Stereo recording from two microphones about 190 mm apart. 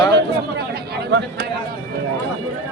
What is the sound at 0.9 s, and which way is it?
Speech, 70° right (ahead or behind).